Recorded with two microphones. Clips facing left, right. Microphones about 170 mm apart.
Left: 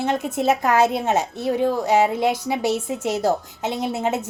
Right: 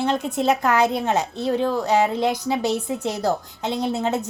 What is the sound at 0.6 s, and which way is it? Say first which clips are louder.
A woman's voice: left 1 dB; 15° left (ahead or behind).